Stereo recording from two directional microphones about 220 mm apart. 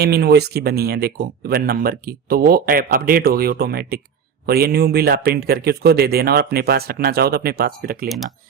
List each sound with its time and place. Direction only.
0.0 s speech: 45° right (ahead or behind)